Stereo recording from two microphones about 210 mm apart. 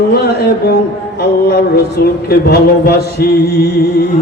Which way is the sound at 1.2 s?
45° left (ahead or behind).